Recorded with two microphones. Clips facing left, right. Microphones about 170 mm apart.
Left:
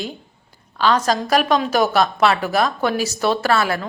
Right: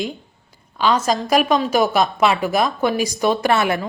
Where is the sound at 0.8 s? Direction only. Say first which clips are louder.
Even; 10° right (ahead or behind).